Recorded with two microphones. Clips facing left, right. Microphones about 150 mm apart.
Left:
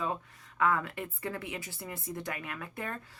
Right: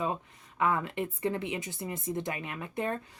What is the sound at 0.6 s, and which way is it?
Speech, 20° right (ahead or behind).